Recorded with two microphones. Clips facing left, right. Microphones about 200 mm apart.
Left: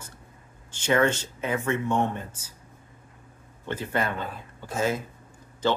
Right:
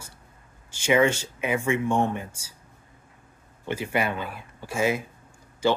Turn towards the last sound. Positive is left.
turn(degrees=-10)  # may be behind; listen again after turning